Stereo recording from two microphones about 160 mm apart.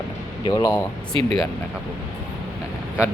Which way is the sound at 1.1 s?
35° right (ahead or behind).